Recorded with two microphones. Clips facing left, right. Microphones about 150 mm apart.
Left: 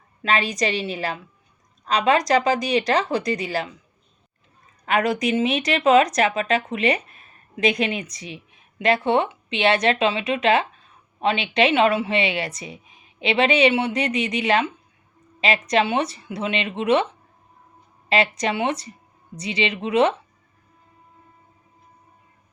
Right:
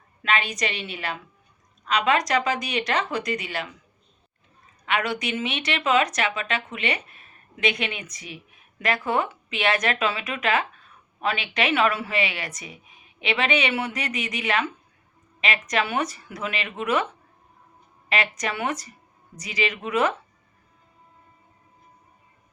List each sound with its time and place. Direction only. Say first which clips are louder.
0.2 s speech: left 3 dB; 35° left (ahead or behind)
4.9 s speech: left 6 dB; 40° left (ahead or behind)
18.1 s speech: left 6 dB; 30° left (ahead or behind)